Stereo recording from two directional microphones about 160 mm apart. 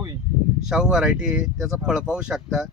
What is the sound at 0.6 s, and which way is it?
Speech, 5° right (ahead or behind).